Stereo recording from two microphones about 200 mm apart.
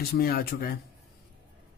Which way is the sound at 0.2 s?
50° left (ahead or behind).